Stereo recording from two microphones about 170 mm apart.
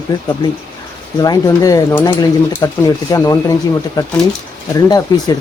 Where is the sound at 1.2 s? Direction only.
20° left (ahead or behind).